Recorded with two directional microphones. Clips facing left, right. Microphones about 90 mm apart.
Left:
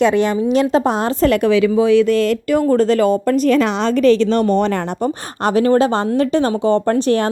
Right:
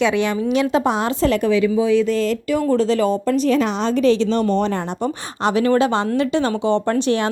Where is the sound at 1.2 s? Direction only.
55° left (ahead or behind).